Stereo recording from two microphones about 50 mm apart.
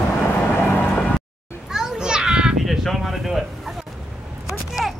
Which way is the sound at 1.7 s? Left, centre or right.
Centre.